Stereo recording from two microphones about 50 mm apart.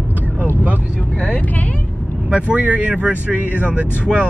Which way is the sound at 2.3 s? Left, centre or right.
Right.